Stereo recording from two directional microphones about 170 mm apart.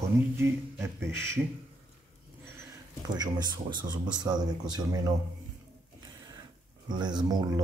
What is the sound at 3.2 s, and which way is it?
Speech, 25° right (ahead or behind).